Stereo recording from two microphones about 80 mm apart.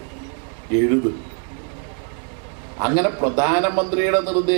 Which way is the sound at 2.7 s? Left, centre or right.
Centre.